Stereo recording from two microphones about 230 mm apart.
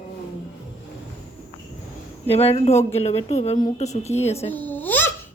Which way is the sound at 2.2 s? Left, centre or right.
Left.